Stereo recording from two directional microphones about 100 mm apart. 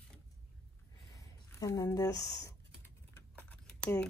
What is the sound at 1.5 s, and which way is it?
Speech, 35° left (ahead or behind).